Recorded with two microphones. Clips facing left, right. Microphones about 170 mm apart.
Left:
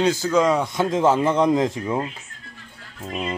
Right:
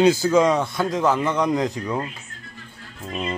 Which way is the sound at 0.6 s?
20° left (ahead or behind).